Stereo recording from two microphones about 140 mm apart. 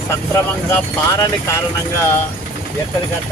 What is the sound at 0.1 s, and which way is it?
Speech, 15° left (ahead or behind).